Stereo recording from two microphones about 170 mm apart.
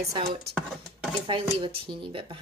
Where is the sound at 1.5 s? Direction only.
30° right (ahead or behind).